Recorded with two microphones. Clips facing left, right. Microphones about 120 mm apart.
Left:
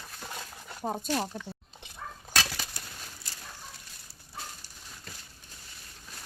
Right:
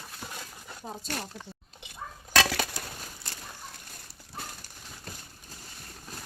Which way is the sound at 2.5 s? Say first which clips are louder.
Right 9 dB; 85° right.